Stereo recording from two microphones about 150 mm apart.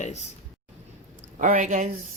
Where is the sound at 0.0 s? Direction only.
50° left (ahead or behind).